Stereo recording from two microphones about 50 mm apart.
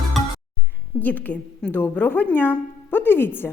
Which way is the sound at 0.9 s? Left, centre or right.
Left.